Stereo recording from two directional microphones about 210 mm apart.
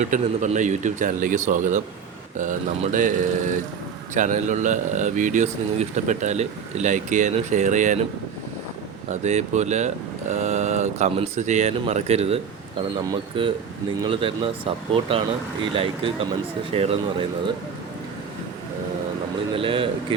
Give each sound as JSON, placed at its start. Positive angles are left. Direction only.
{"t": 0.0, "sound": "speech", "side_deg": -35}
{"t": 9.2, "sound": "speech", "side_deg": -35}
{"t": 15.6, "sound": "speech", "side_deg": -25}
{"t": 19.5, "sound": "speech", "side_deg": -25}